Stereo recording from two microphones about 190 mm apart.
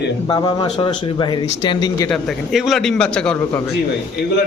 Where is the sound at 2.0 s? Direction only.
Centre (ahead or behind).